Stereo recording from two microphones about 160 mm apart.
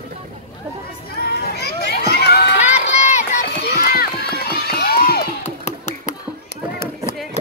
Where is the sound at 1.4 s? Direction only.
90° left.